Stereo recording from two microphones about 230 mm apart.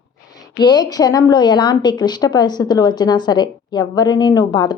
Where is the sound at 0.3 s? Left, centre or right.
Centre.